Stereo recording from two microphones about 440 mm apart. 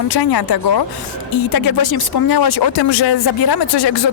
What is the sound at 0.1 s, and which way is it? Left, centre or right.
Speech, left.